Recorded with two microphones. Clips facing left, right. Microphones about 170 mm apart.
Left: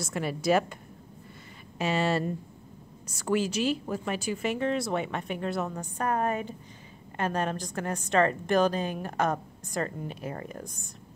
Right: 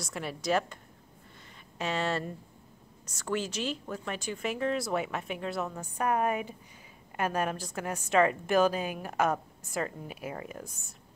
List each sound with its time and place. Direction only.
0.0 s speech: centre (ahead or behind)
1.8 s a woman's voice: 10° left (ahead or behind)